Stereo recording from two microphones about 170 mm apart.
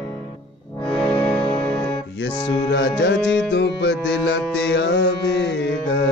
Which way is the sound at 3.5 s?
85° left.